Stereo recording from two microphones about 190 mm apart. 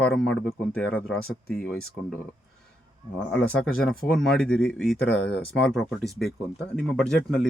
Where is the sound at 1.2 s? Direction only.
50° left (ahead or behind).